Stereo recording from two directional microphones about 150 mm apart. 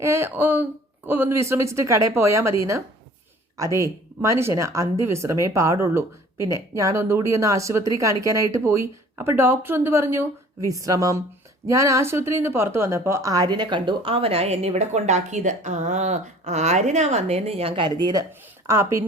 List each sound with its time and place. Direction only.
0.0 s a woman's voice: 15° right (ahead or behind)